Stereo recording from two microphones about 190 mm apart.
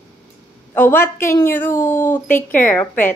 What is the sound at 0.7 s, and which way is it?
A woman's voice, 10° left (ahead or behind).